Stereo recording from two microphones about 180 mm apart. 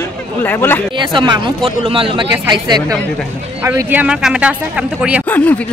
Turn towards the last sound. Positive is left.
turn(degrees=10)  # may be behind; listen again after turning